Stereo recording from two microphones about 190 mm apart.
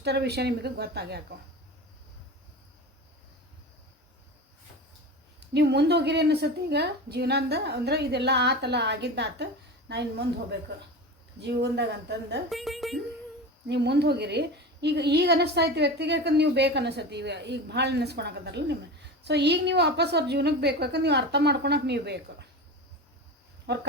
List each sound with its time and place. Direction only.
0.0 s a woman's voice: 60° right (ahead or behind)
5.4 s a woman's voice: 65° right (ahead or behind)
12.5 s speech: centre (ahead or behind)
13.7 s a woman's voice: 60° right (ahead or behind)